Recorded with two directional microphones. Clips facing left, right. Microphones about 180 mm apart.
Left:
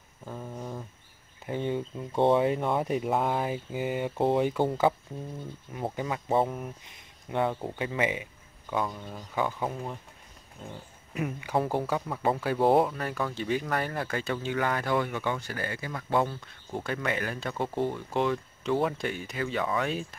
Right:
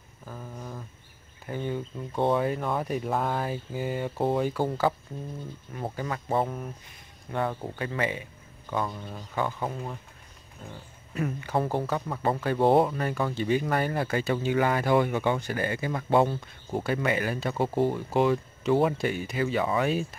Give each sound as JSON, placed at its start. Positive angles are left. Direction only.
{"t": 0.3, "sound": "a sound", "side_deg": 10}
{"t": 1.4, "sound": "speech", "side_deg": 25}
{"t": 5.9, "sound": "speech", "side_deg": 15}
{"t": 8.6, "sound": "speech", "side_deg": 0}
{"t": 9.3, "sound": "speech", "side_deg": 10}
{"t": 10.6, "sound": "speech", "side_deg": 20}
{"t": 11.1, "sound": "speech", "side_deg": 10}
{"t": 16.7, "sound": "speech", "side_deg": -5}